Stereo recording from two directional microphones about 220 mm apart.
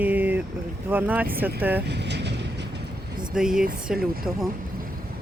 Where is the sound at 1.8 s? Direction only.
50° right (ahead or behind).